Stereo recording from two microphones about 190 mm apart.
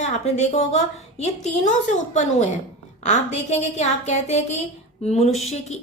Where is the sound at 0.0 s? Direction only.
35° left (ahead or behind).